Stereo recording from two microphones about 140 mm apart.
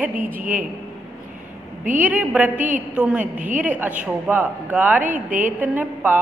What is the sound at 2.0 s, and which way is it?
Speech, 10° right (ahead or behind).